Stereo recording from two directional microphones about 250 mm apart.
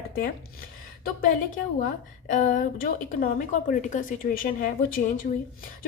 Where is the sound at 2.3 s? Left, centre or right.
Left.